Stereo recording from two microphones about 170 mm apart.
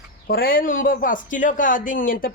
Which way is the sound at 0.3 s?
60° left (ahead or behind).